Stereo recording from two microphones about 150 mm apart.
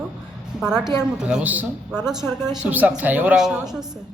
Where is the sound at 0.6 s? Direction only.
5° right (ahead or behind).